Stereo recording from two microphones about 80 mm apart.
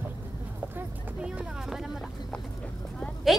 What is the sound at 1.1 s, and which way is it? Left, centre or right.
Vehicle, centre.